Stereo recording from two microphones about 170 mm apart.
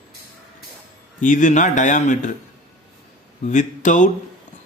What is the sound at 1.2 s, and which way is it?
Speech, 45° left (ahead or behind).